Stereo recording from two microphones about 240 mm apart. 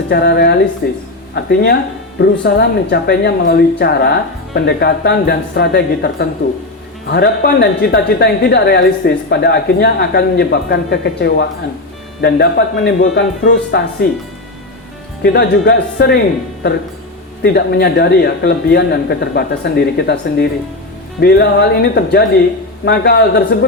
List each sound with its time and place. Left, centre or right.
0.1 s a woman's voice: left
15.2 s a woman's voice: left
17.4 s a woman's voice: left